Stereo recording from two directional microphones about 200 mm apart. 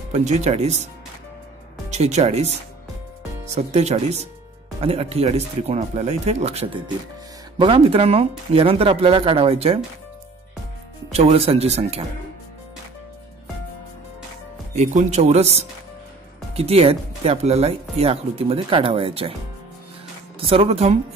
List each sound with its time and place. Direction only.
0.1 s speech: 35° right (ahead or behind)
1.9 s speech: 35° right (ahead or behind)
3.5 s speech: 35° right (ahead or behind)
11.1 s speech: 30° right (ahead or behind)
14.8 s speech: 35° right (ahead or behind)
20.3 s speech: 30° right (ahead or behind)